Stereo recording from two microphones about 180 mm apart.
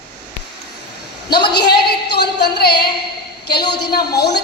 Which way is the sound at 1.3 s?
65° left (ahead or behind).